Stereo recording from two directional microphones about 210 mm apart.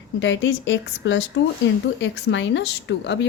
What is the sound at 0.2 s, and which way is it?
Speech, 60° left (ahead or behind).